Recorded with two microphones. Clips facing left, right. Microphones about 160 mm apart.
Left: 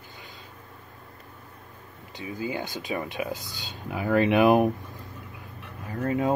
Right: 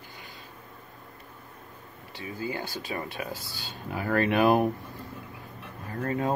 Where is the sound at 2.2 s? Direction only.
20° left (ahead or behind).